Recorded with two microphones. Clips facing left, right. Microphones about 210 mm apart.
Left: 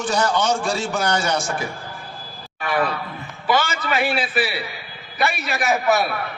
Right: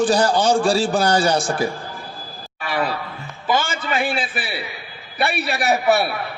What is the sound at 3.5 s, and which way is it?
Speech, 30° right (ahead or behind).